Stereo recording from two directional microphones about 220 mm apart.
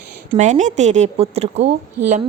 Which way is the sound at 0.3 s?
35° right (ahead or behind).